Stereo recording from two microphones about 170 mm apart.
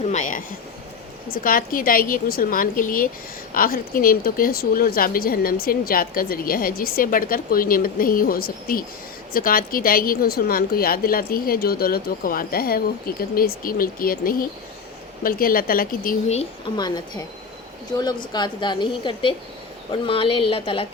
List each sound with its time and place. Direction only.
0.0 s a woman's voice: 45° left (ahead or behind)
16.7 s a woman's voice: 25° left (ahead or behind)